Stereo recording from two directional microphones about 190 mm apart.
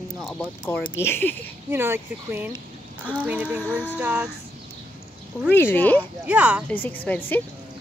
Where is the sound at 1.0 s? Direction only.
10° left (ahead or behind).